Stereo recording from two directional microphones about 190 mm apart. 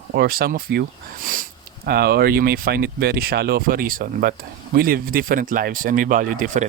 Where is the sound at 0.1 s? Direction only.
55° right (ahead or behind).